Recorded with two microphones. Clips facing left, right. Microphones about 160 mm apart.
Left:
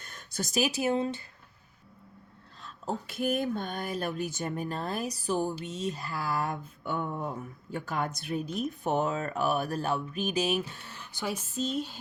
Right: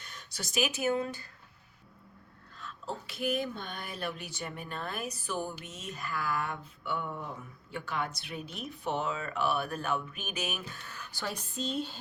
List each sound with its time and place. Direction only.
0.0 s speech: 50° left (ahead or behind); by 1.3 s 25° left (ahead or behind)
2.6 s a sound: 35° left (ahead or behind)
3.1 s speech: 50° left (ahead or behind); by 11.3 s 25° left (ahead or behind)
11.3 s speech: 5° left (ahead or behind)